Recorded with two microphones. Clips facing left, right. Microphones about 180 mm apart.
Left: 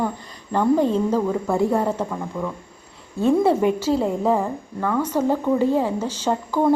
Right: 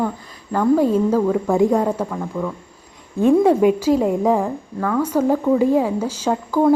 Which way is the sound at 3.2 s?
15° right (ahead or behind).